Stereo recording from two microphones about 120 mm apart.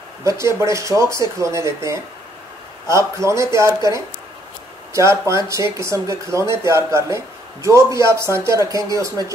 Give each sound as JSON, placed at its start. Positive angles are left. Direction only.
{"t": 0.2, "sound": "speech", "side_deg": -25}
{"t": 4.9, "sound": "speech", "side_deg": -25}